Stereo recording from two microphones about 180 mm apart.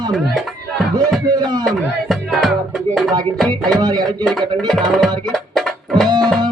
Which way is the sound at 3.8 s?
20° right (ahead or behind).